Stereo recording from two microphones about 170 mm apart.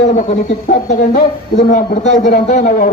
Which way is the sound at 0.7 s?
45° left (ahead or behind).